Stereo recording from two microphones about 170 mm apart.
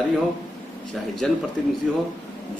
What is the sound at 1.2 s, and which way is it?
Speech, 5° left (ahead or behind).